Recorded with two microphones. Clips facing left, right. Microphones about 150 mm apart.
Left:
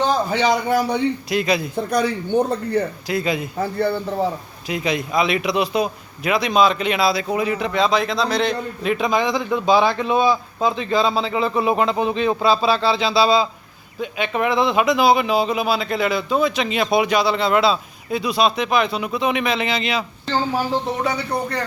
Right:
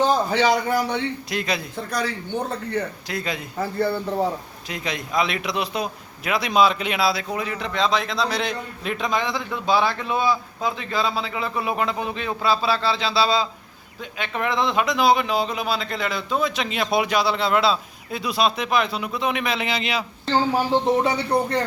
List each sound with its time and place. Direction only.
0.3 s a man's voice: 15° left (ahead or behind)
0.9 s speech: 5° left (ahead or behind)
1.7 s a man's voice: 20° left (ahead or behind)
3.1 s a man's voice: 5° left (ahead or behind)
4.7 s speech: 5° left (ahead or behind)
7.3 s speech: 10° left (ahead or behind); by 8.9 s 5° right (ahead or behind)
8.9 s a man's voice: 10° left (ahead or behind); by 20.1 s 10° right (ahead or behind)
21.0 s speech: 25° right (ahead or behind)